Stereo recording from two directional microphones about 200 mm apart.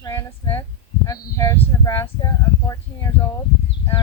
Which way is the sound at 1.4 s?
15° left (ahead or behind).